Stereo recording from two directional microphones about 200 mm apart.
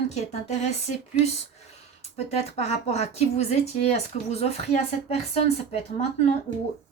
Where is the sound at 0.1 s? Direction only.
35° left (ahead or behind).